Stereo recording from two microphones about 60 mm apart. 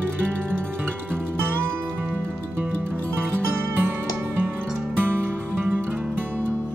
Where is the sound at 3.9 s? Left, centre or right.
Right.